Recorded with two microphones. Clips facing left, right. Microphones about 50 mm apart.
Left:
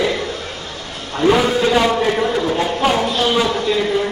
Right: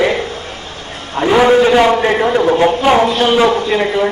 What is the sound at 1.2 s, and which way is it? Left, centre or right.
A man's voice, right.